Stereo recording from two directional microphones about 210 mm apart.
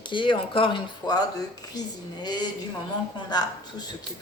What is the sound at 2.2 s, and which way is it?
Speech, 20° left (ahead or behind).